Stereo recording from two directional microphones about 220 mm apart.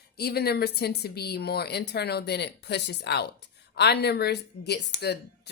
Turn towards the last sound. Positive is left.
turn(degrees=50)  # may be behind; listen again after turning